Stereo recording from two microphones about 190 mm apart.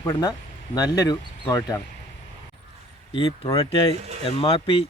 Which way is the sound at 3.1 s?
30° left (ahead or behind).